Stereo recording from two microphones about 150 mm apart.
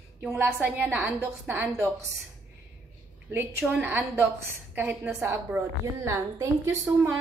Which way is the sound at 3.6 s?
10° right (ahead or behind).